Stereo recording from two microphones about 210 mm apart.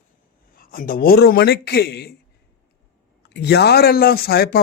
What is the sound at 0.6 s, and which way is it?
Speech, 45° left (ahead or behind).